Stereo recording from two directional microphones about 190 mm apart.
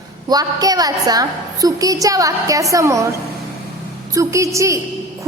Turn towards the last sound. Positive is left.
turn(degrees=-15)  # may be behind; listen again after turning